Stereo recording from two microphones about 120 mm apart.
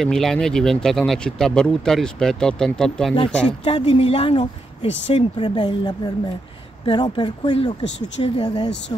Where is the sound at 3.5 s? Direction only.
50° left (ahead or behind).